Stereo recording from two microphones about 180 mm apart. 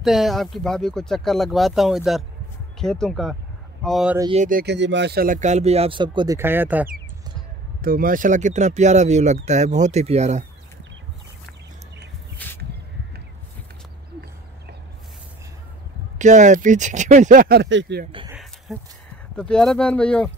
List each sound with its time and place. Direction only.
0.0 s speech: centre (ahead or behind)
4.3 s speech: 45° right (ahead or behind)
4.6 s speech: 80° right; by 6.9 s 10° right (ahead or behind)
7.8 s speech: 50° right (ahead or behind)
12.4 s a sound: 10° left (ahead or behind)
16.2 s speech: 45° right (ahead or behind); by 18.0 s 80° right
18.3 s a sound: centre (ahead or behind)
19.3 s speech: 5° left (ahead or behind)